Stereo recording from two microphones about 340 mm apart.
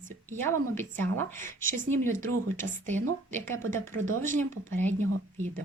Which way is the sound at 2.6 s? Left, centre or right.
Centre.